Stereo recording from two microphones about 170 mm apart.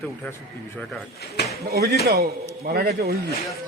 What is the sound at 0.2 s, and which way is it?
Speech, 10° left (ahead or behind).